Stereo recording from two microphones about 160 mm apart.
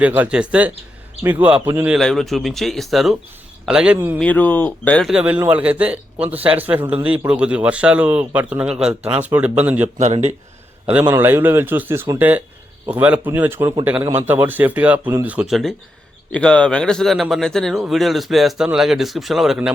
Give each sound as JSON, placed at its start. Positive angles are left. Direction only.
{"t": 0.0, "sound": "speech", "side_deg": -10}
{"t": 2.0, "sound": "speech", "side_deg": 5}
{"t": 4.2, "sound": "speech", "side_deg": 10}
{"t": 5.1, "sound": "speech", "side_deg": -10}
{"t": 10.0, "sound": "speech", "side_deg": -45}
{"t": 11.1, "sound": "speech", "side_deg": -15}